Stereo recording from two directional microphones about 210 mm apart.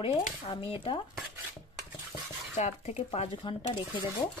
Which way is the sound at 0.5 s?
20° left (ahead or behind).